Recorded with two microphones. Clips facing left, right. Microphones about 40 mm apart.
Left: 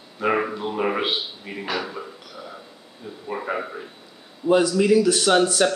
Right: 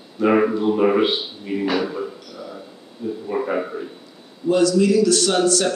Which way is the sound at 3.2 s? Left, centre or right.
Centre.